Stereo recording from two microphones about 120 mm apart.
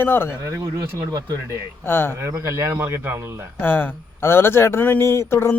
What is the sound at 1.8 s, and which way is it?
Speech, 20° left (ahead or behind).